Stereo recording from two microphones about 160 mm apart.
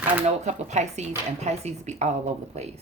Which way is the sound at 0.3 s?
45° right (ahead or behind).